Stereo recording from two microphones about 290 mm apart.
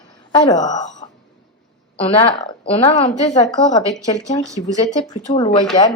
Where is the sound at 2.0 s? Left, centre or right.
Centre.